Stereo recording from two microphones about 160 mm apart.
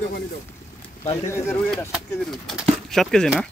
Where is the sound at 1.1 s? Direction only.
20° left (ahead or behind).